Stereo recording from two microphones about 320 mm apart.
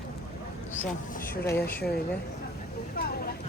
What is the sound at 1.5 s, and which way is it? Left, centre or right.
Speech, centre.